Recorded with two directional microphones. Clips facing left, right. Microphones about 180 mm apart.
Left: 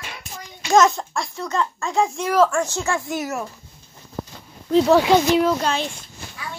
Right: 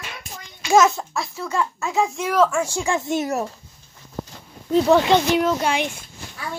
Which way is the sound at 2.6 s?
10° right (ahead or behind).